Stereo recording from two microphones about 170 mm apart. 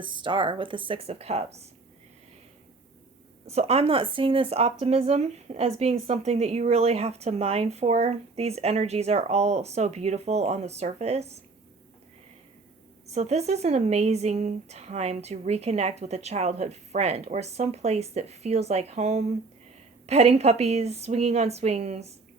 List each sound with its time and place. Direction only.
0.0 s speech: 30° right (ahead or behind)
3.4 s speech: 40° right (ahead or behind)
13.1 s speech: 40° right (ahead or behind)